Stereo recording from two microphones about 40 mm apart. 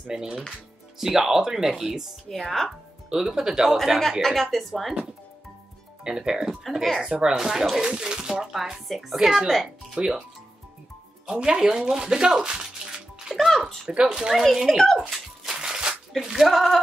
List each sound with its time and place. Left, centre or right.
0.0 s speech: centre
2.2 s speech: centre
3.1 s speech: centre
4.2 s speech: centre
6.0 s speech: centre
8.8 s speech: centre
9.9 s speech: centre
11.3 s speech: right
13.3 s music: centre
13.8 s speech: right
14.3 s speech: centre
15.4 s music: centre
16.2 s speech: centre
16.5 s speech: centre